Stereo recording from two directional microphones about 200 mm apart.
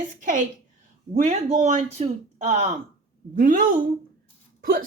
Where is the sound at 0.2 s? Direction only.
40° right (ahead or behind).